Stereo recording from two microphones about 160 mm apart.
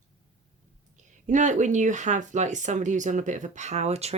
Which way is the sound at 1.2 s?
50° right (ahead or behind).